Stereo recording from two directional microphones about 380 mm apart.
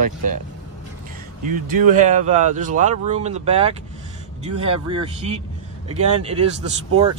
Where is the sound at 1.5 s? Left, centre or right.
Right.